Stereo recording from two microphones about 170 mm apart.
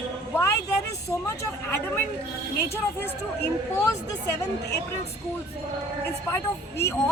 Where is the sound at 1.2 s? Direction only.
10° left (ahead or behind).